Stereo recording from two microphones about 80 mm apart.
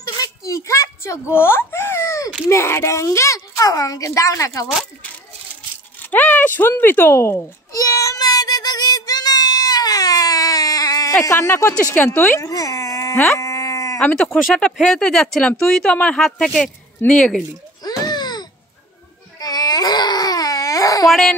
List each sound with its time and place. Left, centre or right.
0.2 s baby cry: left
2.4 s a woman's voice: left
6.0 s a sound: left
6.8 s speech: left
7.7 s child singing: left
11.2 s a woman's voice: left
11.5 s speech: left
12.4 s dog: left
13.4 s sheep: left
14.3 s speech: centre
17.8 s a sound: left
19.4 s baby cry: left
21.1 s speech: centre